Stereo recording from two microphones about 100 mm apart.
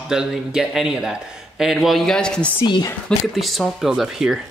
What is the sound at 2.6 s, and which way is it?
Speech, 45° left (ahead or behind).